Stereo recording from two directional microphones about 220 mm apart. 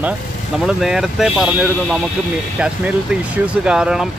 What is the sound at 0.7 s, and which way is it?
Speech, centre (ahead or behind).